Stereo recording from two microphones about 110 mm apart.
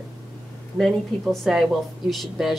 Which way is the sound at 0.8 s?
Centre (ahead or behind).